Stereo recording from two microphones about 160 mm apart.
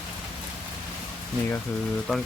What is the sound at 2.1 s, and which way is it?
Speech, centre (ahead or behind).